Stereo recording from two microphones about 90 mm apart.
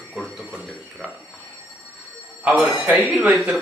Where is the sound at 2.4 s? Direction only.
15° right (ahead or behind).